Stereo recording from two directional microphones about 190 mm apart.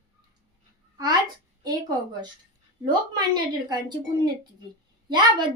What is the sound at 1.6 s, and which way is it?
A child's voice, 20° right (ahead or behind).